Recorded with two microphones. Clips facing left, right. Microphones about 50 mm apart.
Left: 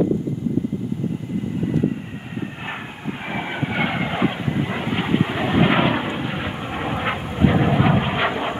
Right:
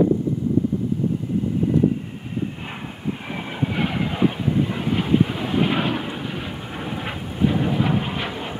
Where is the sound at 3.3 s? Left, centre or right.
Left.